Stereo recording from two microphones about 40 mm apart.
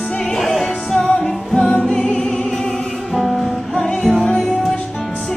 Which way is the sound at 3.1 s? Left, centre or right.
Centre.